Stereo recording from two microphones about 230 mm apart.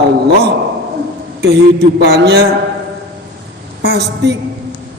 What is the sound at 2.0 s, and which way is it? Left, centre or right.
Speech, right.